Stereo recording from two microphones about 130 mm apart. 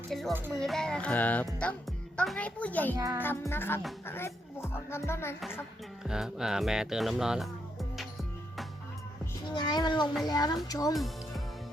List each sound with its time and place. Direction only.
0.1 s speech: centre (ahead or behind)
0.3 s a child's voice: 15° right (ahead or behind)
0.6 s music: 5° left (ahead or behind)
2.1 s a child's voice: 10° left (ahead or behind)
2.9 s a child's voice: 30° right (ahead or behind)
3.2 s music: 15° left (ahead or behind)
4.0 s speech: 20° left (ahead or behind)
6.1 s speech: 5° right (ahead or behind)
9.5 s speech: 35° left (ahead or behind)
10.9 s speech: centre (ahead or behind)